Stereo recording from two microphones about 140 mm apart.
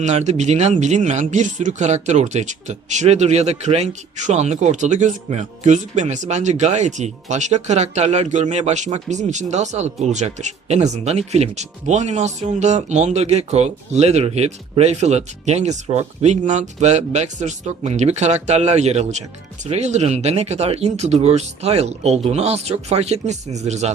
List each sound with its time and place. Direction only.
0.0 s speech: 55° right (ahead or behind)